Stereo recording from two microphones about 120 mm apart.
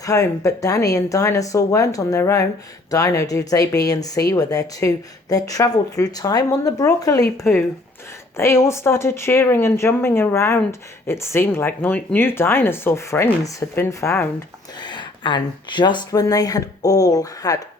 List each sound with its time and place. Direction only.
0.0 s speech: 30° left (ahead or behind)
14.8 s speech: 40° left (ahead or behind)